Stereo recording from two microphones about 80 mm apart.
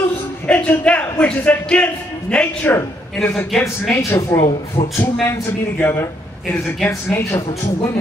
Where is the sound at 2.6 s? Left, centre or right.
Left.